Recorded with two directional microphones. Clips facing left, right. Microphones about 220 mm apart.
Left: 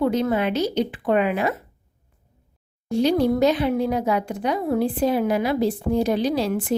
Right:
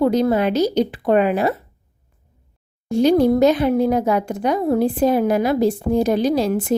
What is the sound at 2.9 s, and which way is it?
Speech, 45° right (ahead or behind).